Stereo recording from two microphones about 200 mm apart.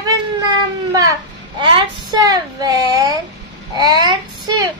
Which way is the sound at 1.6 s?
25° right (ahead or behind).